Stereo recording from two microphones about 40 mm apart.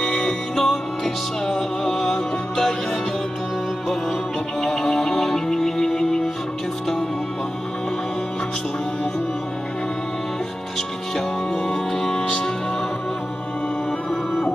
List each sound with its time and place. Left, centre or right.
0.0 s music: centre
4.6 s music: centre
11.1 s music: centre